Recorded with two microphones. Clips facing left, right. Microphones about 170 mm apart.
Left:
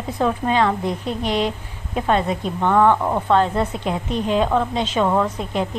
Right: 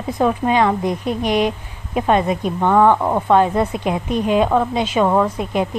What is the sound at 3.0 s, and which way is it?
Speech, 25° right (ahead or behind).